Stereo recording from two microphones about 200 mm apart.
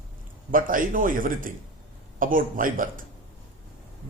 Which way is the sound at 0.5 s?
45° right (ahead or behind).